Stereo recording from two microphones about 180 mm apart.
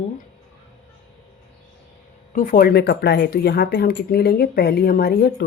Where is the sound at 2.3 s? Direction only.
50° left (ahead or behind).